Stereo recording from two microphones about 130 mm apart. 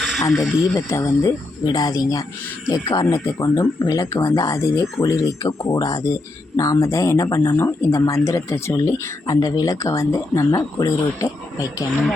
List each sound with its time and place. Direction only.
0.2 s speech: 20° left (ahead or behind)